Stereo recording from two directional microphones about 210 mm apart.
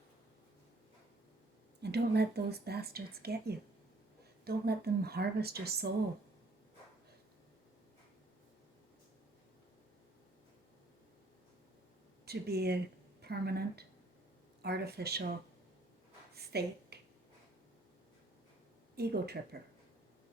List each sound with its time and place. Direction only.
1.8 s speech: 50° right (ahead or behind)
12.2 s speech: 50° right (ahead or behind)
16.3 s a sound: 50° right (ahead or behind)
18.9 s speech: 50° right (ahead or behind)